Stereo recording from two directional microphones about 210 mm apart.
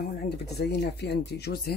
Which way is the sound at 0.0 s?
50° left (ahead or behind).